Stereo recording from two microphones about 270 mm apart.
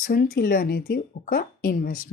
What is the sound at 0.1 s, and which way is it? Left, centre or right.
Speech, left.